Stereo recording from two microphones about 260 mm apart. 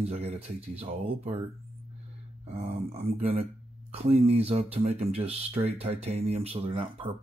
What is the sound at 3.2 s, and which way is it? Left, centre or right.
Speech, right.